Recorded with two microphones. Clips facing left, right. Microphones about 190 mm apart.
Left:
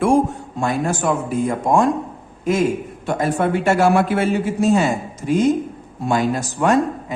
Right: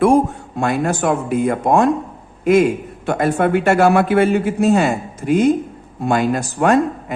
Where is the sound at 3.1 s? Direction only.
60° right (ahead or behind).